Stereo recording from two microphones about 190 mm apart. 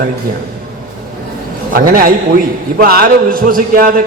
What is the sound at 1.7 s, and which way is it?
A man's voice, 50° right (ahead or behind).